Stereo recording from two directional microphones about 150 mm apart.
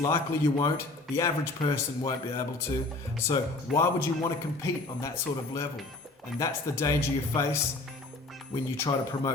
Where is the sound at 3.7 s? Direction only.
Centre (ahead or behind).